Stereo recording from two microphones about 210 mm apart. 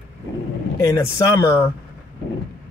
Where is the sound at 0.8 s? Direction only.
15° left (ahead or behind).